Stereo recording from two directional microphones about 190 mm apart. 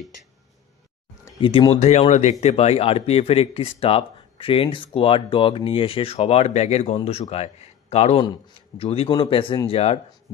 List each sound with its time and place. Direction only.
1.4 s speech: 30° left (ahead or behind)